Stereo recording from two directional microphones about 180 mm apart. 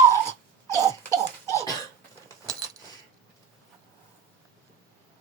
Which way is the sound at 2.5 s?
20° right (ahead or behind).